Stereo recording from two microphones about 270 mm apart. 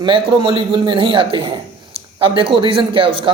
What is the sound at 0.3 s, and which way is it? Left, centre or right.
Speech, centre.